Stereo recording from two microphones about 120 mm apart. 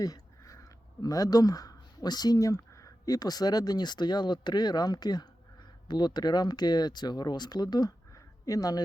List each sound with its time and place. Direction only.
0.0 s speech: 30° left (ahead or behind)